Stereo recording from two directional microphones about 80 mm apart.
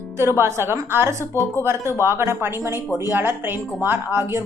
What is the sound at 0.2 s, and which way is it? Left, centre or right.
Speech, right.